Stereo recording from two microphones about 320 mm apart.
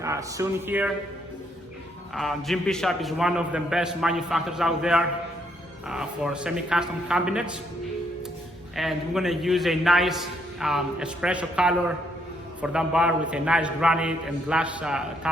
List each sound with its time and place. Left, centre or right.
0.0 s speech: centre
2.1 s a man's voice: centre
8.7 s a man's voice: centre